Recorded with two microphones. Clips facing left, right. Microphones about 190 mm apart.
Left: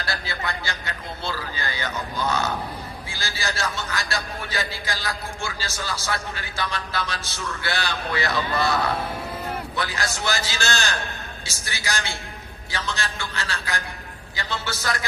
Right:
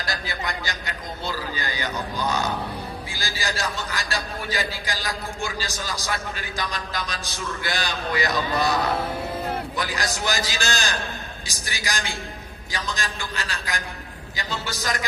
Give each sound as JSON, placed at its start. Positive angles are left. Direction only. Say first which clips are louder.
{"t": 0.0, "sound": "a man's voice", "louder": "even", "side_deg": -15}